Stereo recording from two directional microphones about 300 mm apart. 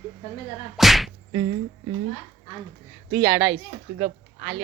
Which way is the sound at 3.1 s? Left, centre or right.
Centre.